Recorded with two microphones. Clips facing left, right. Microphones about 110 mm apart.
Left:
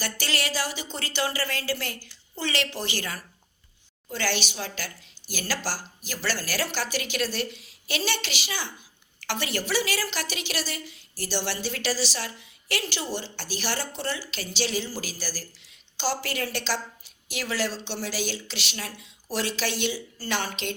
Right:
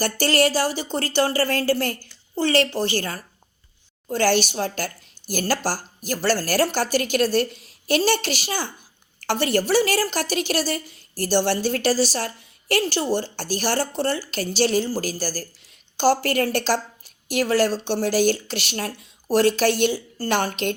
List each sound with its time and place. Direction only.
0.0 s a woman's voice: 45° right (ahead or behind)